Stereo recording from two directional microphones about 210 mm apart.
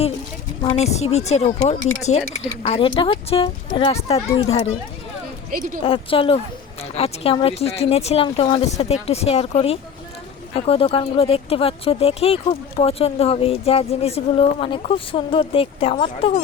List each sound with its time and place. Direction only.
0.6 s speech: 30° left (ahead or behind)
5.5 s speech: 40° right (ahead or behind)
5.8 s speech: 25° left (ahead or behind)